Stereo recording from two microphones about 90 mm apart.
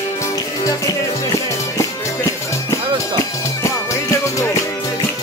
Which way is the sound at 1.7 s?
35° left (ahead or behind).